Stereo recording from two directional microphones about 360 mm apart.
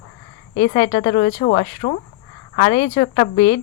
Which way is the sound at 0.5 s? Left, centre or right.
Left.